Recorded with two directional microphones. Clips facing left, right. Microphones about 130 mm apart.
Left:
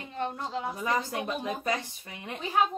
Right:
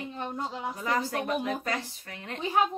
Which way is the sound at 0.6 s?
15° left (ahead or behind).